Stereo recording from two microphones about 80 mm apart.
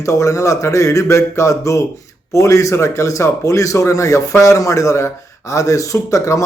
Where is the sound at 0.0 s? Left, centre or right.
Left.